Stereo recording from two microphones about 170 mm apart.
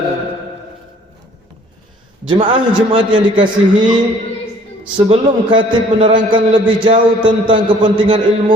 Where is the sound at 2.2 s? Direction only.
30° right (ahead or behind).